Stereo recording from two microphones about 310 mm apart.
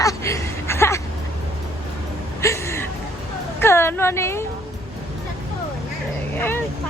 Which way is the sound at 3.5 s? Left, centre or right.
Centre.